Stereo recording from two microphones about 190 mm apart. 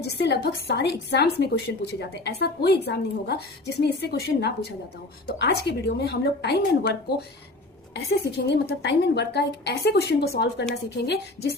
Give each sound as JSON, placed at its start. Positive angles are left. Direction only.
{"t": 0.0, "sound": "a woman's voice", "side_deg": 60}
{"t": 8.4, "sound": "a woman's voice", "side_deg": 60}